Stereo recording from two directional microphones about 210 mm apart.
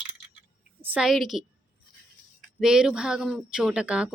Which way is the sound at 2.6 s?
5° right (ahead or behind).